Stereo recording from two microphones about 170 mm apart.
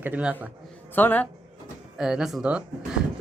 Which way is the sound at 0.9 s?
10° left (ahead or behind).